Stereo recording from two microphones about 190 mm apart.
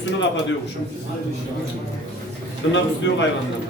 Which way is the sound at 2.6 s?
85° left.